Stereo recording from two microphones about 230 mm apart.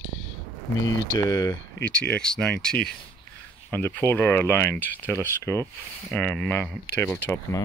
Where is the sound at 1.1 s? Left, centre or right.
Centre.